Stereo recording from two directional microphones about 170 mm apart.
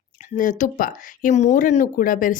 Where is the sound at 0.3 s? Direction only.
50° left (ahead or behind).